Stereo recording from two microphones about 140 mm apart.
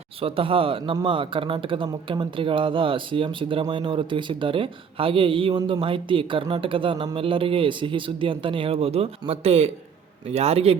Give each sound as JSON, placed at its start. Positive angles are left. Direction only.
{"t": 0.2, "sound": "speech", "side_deg": -40}